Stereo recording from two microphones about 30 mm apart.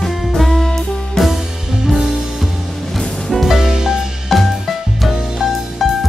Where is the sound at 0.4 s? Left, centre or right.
Centre.